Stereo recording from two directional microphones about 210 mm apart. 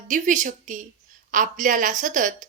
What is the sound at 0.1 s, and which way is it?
Speech, 40° right (ahead or behind).